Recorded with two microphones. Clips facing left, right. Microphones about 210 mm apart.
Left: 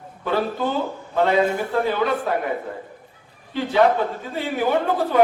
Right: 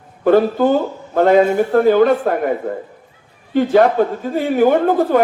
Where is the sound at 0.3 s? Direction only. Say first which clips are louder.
Right 10 dB; 50° right (ahead or behind).